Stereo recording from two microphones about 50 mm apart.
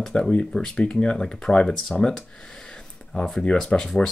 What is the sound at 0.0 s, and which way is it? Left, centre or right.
Speech, centre.